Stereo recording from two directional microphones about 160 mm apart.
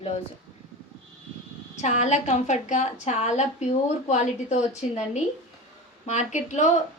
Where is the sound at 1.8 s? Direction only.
45° left (ahead or behind).